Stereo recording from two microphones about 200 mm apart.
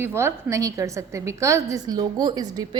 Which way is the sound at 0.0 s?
10° right (ahead or behind).